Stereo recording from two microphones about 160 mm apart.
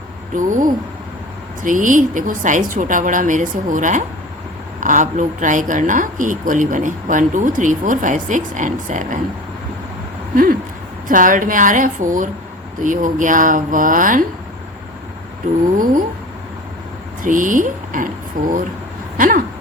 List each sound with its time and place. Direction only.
0.3 s speech: 55° right (ahead or behind)
10.3 s speech: 65° right (ahead or behind)
17.2 s speech: 55° right (ahead or behind)